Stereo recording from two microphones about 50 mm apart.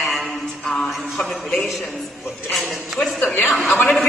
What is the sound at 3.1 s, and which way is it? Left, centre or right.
Speech, left.